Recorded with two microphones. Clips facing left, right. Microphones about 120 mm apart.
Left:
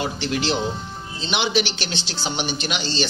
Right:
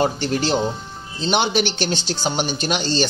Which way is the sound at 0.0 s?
45° right (ahead or behind).